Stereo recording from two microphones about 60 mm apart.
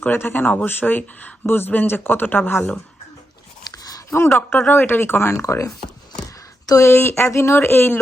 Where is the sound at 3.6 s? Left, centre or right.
Left.